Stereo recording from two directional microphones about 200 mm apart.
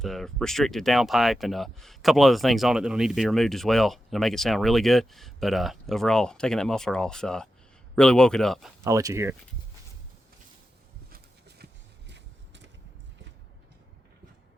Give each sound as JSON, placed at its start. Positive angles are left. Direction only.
{"t": 0.0, "sound": "speech", "side_deg": 0}
{"t": 8.8, "sound": "speech", "side_deg": -15}
{"t": 11.1, "sound": "a sound", "side_deg": -55}